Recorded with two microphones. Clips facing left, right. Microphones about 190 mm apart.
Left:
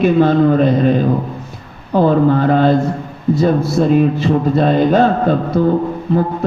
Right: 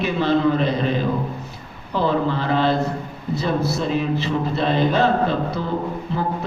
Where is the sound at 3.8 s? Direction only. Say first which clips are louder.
Left 9 dB; 50° left (ahead or behind).